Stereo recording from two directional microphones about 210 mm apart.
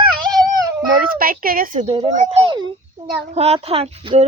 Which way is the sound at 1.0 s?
45° right (ahead or behind).